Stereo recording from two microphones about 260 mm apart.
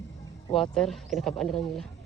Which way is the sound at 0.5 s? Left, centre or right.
Centre.